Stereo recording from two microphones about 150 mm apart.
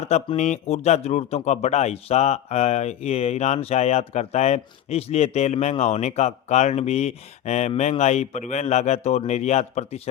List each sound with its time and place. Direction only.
0.3 s speech: 50° left (ahead or behind)